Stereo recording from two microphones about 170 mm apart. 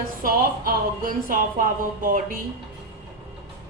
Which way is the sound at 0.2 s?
55° right (ahead or behind).